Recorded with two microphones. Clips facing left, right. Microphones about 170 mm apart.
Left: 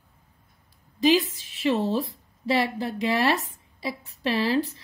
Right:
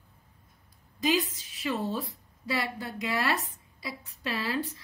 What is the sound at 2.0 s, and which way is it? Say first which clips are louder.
Speech: left 7 dB; 25° left (ahead or behind).